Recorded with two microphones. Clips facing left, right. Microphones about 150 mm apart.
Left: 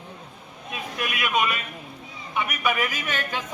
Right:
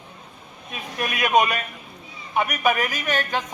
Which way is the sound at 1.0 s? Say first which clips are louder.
Right 6 dB; 45° right (ahead or behind).